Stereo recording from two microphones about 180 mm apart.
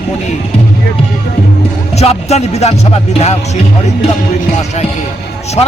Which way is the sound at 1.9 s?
35° left (ahead or behind).